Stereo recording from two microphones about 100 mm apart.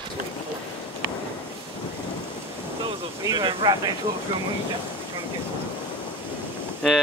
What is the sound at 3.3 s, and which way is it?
Speech, 45° right (ahead or behind).